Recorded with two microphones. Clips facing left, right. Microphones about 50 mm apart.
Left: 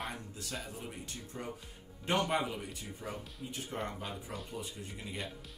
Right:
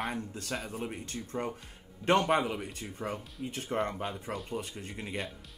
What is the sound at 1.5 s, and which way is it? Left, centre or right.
Music, right.